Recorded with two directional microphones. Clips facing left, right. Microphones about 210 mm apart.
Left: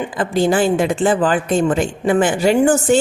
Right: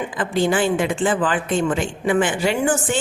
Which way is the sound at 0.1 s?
40° left (ahead or behind).